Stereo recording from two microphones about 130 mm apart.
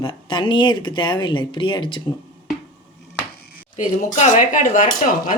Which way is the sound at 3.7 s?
85° left.